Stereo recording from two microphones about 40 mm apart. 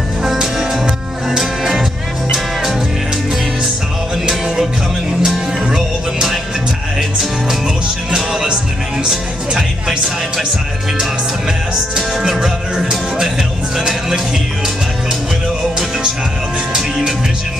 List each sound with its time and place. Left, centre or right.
0.2 s music: centre
5.2 s music: centre
8.1 s music: centre
9.6 s music: centre
13.7 s music: centre